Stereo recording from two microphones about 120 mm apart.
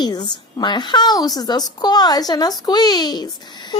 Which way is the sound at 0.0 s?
35° left (ahead or behind).